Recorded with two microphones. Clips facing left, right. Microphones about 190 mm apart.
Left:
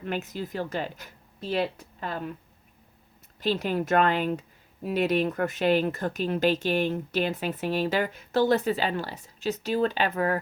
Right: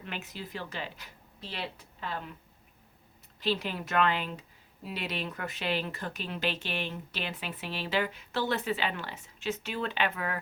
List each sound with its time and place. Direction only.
0.0 s speech: 45° left (ahead or behind)
3.4 s speech: 45° left (ahead or behind)